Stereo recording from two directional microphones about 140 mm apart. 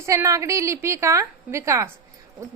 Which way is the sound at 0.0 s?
20° right (ahead or behind).